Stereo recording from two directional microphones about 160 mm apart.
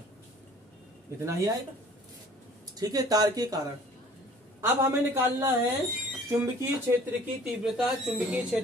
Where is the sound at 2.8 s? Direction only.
25° right (ahead or behind).